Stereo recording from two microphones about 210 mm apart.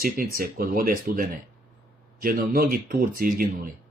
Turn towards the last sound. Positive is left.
turn(degrees=-45)  # may be behind; listen again after turning